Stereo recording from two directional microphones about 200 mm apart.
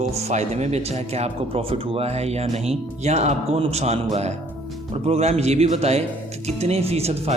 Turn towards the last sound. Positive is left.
turn(degrees=-30)  # may be behind; listen again after turning